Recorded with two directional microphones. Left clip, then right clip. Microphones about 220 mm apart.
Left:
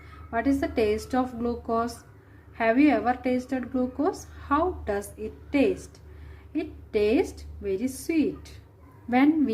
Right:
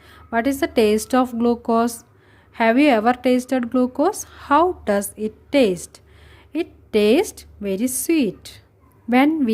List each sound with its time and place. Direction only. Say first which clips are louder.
0.3 s a woman's voice: right 6 dB; 50° right (ahead or behind)